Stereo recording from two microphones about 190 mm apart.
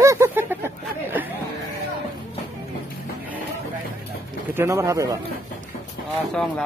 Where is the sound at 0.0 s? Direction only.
15° right (ahead or behind).